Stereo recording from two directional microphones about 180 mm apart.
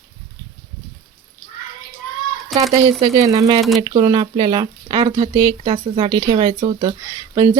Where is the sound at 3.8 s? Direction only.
25° right (ahead or behind).